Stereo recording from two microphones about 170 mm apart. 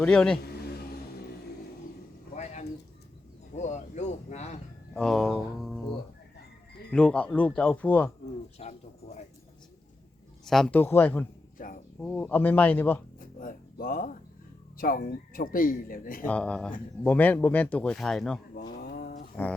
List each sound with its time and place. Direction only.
0.0 s speech: 5° left (ahead or behind)
2.3 s a sound: 45° left (ahead or behind)
4.9 s speech: centre (ahead or behind)
6.9 s speech: 5° left (ahead or behind)
8.5 s bird: 40° left (ahead or behind)
10.4 s speech: centre (ahead or behind)
11.5 s a sound: 50° left (ahead or behind)
11.9 s speech: 10° left (ahead or behind)
13.1 s a sound: 55° left (ahead or behind)
14.8 s speech: 55° left (ahead or behind)
16.2 s speech: 10° left (ahead or behind)
18.7 s a sound: 65° left (ahead or behind)